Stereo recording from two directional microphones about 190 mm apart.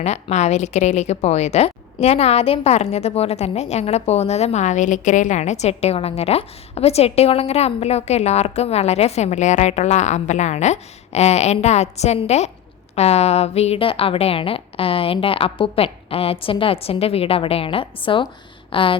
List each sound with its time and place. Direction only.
0.0 s a woman's voice: 35° left (ahead or behind)